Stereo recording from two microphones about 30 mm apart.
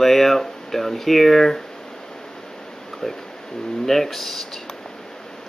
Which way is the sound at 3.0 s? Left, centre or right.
Centre.